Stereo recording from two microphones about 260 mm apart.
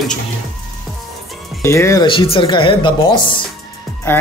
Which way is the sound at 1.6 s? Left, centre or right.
Centre.